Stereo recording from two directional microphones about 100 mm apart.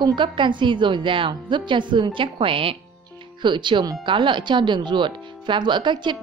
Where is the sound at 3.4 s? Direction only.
50° right (ahead or behind).